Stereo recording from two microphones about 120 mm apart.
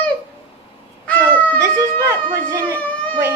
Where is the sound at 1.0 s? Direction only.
10° left (ahead or behind).